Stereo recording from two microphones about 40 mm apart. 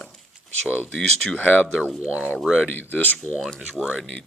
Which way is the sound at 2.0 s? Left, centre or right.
Right.